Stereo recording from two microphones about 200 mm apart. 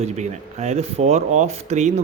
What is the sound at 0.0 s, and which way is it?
Speech, 35° right (ahead or behind).